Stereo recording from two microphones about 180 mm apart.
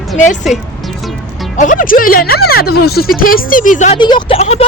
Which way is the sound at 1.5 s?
45° left (ahead or behind).